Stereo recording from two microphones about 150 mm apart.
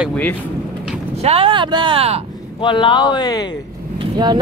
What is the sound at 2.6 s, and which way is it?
Speech, 35° left (ahead or behind).